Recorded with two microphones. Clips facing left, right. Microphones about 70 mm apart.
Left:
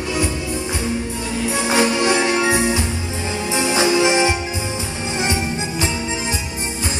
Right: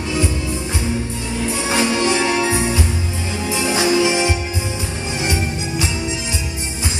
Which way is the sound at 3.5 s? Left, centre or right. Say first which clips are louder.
Even; left.